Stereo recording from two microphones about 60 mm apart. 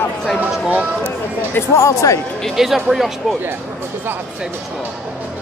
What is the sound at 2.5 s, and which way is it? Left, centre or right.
Speech, centre.